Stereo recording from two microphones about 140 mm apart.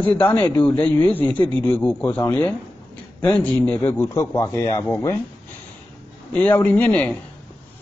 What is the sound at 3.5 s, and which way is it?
A man's voice, 10° left (ahead or behind).